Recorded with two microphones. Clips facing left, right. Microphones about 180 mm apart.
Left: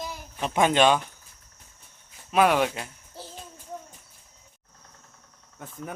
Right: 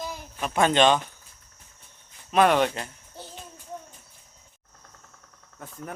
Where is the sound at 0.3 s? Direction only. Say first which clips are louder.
Even; 15° left (ahead or behind).